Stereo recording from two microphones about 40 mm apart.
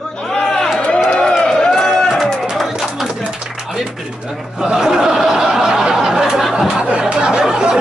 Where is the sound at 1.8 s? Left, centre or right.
Centre.